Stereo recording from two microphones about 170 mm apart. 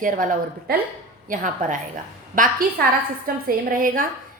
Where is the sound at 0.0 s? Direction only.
50° right (ahead or behind).